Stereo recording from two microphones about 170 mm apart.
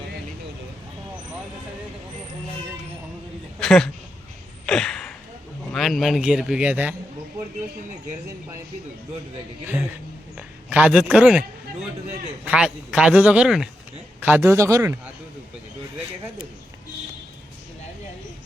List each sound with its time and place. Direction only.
3.6 s speech: 5° left (ahead or behind)
4.6 s a sound: 5° left (ahead or behind)
5.7 s a man's voice: centre (ahead or behind)
10.3 s a man's voice: 10° right (ahead or behind)